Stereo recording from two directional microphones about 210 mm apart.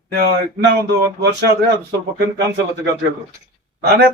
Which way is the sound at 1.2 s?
50° right (ahead or behind).